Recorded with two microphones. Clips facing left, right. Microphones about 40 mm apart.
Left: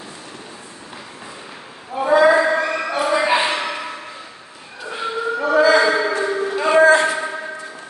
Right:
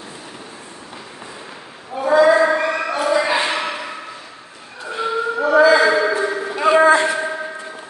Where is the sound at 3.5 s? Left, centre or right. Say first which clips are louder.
Right 1 dB; centre.